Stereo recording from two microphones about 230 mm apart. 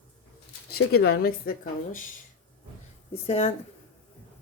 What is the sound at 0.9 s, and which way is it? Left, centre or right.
Speech, left.